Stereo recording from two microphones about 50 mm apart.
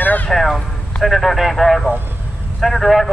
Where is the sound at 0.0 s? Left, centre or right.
Left.